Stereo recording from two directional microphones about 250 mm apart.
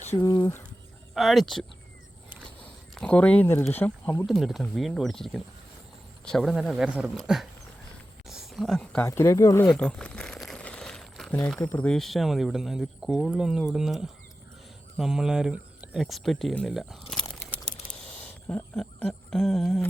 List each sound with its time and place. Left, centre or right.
0.0 s a sound: left
0.3 s speech: centre
1.1 s speech: centre
2.9 s speech: centre
18.4 s speech: centre